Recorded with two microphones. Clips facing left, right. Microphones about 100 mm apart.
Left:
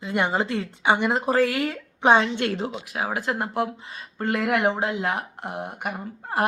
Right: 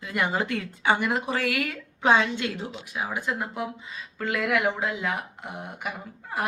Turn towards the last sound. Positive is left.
turn(degrees=60)  # may be behind; listen again after turning